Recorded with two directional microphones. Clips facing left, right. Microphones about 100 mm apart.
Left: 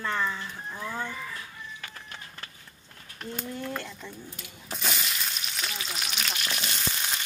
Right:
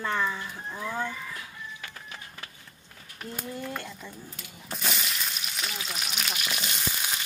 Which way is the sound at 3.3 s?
5° right (ahead or behind).